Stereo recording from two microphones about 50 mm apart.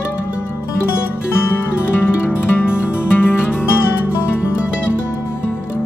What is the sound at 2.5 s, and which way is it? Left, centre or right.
Music, left.